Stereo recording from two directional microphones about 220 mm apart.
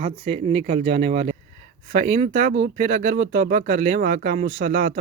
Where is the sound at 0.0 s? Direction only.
30° right (ahead or behind).